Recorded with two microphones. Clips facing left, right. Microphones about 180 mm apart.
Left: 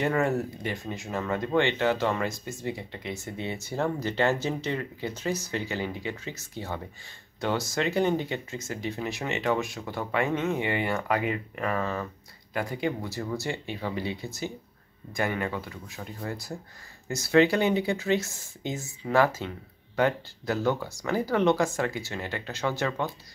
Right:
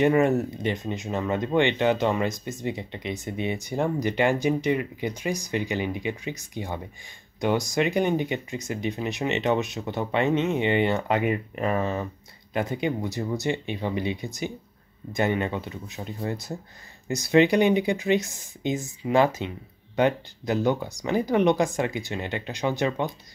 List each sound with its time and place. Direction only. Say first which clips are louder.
0.0 s speech: right 6 dB; 20° right (ahead or behind)